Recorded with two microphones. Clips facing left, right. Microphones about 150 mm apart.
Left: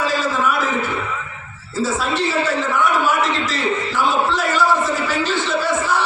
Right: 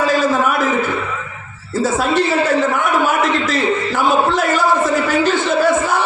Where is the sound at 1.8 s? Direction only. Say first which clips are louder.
Right 5 dB; 50° right (ahead or behind).